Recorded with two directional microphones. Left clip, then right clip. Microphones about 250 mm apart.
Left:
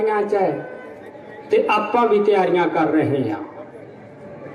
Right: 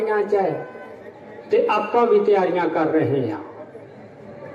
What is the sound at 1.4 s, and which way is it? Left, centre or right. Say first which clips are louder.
A man's voice: left 1 dB; centre.